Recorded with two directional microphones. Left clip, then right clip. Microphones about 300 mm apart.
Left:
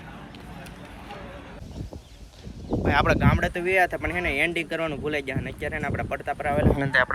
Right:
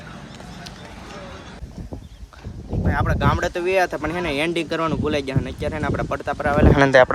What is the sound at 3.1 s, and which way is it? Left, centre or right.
Speech, centre.